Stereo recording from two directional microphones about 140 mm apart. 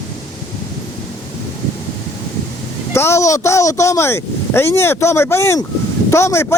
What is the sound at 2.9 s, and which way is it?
Speech, 20° left (ahead or behind).